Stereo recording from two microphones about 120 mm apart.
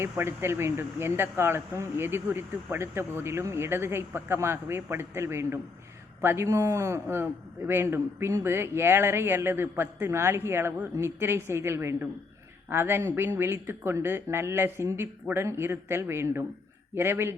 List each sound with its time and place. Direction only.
0.0 s speech: 20° right (ahead or behind)